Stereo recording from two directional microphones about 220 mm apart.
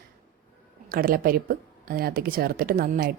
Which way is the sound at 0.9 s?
40° right (ahead or behind).